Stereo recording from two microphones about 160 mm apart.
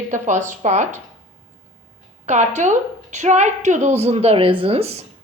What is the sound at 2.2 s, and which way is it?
A woman's voice, 45° right (ahead or behind).